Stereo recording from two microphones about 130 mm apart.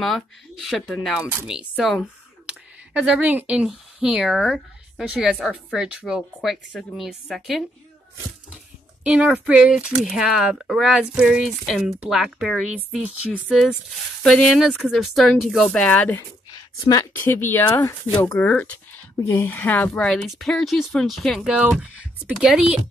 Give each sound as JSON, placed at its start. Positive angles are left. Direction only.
{"t": 0.0, "sound": "speech", "side_deg": 0}
{"t": 9.0, "sound": "a woman's voice", "side_deg": -10}
{"t": 21.5, "sound": "speech", "side_deg": -10}